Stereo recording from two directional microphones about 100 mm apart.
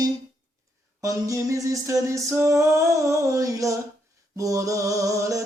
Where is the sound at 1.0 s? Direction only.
35° right (ahead or behind).